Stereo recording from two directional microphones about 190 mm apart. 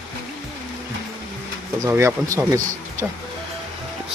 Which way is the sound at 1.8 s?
15° right (ahead or behind).